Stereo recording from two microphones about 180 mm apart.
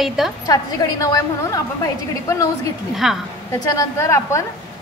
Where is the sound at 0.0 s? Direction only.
Centre (ahead or behind).